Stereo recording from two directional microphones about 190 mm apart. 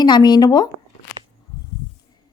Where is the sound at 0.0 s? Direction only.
20° left (ahead or behind).